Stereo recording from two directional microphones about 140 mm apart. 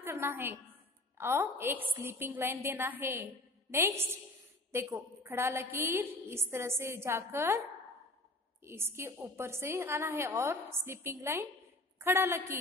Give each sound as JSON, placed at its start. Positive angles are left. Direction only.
{"t": 0.0, "sound": "a woman's voice", "side_deg": -20}
{"t": 4.7, "sound": "a woman's voice", "side_deg": -20}
{"t": 8.6, "sound": "a woman's voice", "side_deg": -15}